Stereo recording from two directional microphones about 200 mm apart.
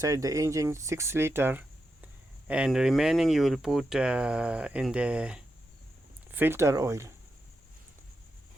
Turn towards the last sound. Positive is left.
turn(degrees=-15)  # may be behind; listen again after turning